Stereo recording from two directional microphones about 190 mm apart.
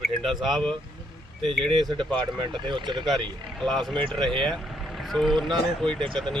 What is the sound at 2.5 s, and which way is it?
Speech, 25° right (ahead or behind).